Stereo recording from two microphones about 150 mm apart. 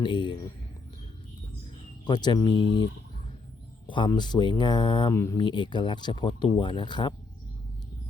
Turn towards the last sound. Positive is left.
turn(degrees=30)  # may be behind; listen again after turning